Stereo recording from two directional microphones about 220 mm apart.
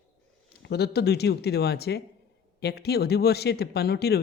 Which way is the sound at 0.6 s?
50° left (ahead or behind).